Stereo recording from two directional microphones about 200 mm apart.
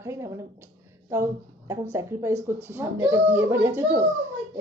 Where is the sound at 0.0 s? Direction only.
15° right (ahead or behind).